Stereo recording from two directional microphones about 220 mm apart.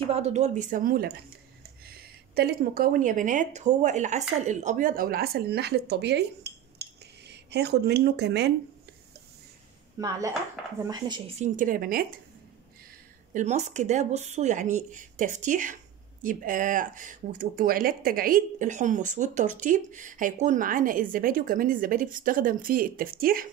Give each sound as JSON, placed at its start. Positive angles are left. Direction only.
{"t": 0.0, "sound": "a woman's voice", "side_deg": -30}
{"t": 9.9, "sound": "speech", "side_deg": -15}
{"t": 13.3, "sound": "speech", "side_deg": -30}